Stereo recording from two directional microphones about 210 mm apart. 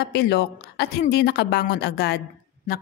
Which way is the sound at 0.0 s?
50° left (ahead or behind).